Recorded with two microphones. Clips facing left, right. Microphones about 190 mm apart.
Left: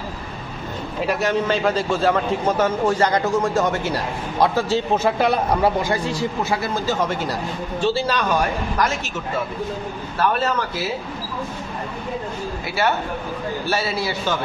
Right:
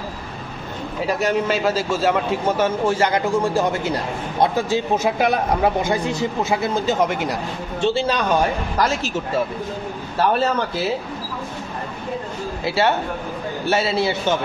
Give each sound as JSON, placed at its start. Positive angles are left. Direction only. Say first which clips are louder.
{"t": 1.2, "sound": "a man's voice", "louder": "right 1 dB", "side_deg": -5}
{"t": 2.5, "sound": "speech", "louder": "even", "side_deg": -30}
{"t": 3.8, "sound": "a man's voice", "louder": "right 1 dB", "side_deg": -20}
{"t": 12.6, "sound": "speech", "louder": "right 3 dB", "side_deg": -25}